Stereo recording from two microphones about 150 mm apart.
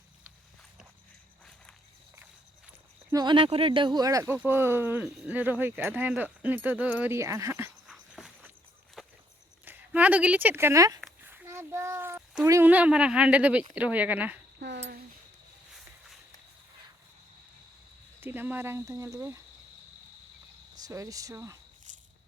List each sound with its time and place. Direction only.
3.1 s speech: 30° right (ahead or behind)
7.9 s dog: centre (ahead or behind)
9.0 s walk: 5° right (ahead or behind)
9.6 s speech: 10° right (ahead or behind)
11.2 s a sound: 15° right (ahead or behind)
12.5 s speech: 15° right (ahead or behind)
18.2 s speech: 15° right (ahead or behind)
20.7 s speech: 25° right (ahead or behind)